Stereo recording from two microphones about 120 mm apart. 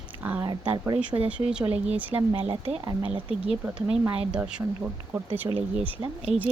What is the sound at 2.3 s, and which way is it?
Speech, 55° right (ahead or behind).